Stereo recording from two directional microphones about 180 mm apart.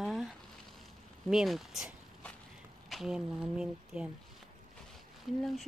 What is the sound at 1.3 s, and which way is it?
Speech, centre (ahead or behind).